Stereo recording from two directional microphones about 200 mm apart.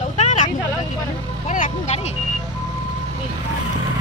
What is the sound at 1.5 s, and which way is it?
Speech, 35° left (ahead or behind).